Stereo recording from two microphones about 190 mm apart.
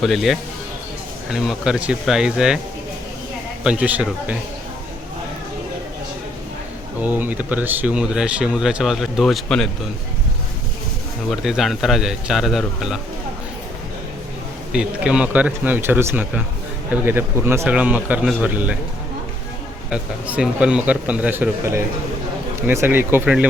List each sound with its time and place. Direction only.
0.0 s speech: centre (ahead or behind)
3.6 s a man's voice: 5° right (ahead or behind)
7.0 s speech: 10° right (ahead or behind)
11.3 s speech: centre (ahead or behind)
14.7 s a man's voice: 5° right (ahead or behind)
19.9 s a man's voice: 5° right (ahead or behind)